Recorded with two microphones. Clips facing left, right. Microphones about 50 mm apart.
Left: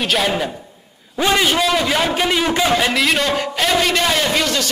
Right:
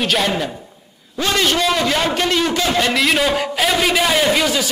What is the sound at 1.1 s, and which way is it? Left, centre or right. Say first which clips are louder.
A man's voice: left 2 dB; centre.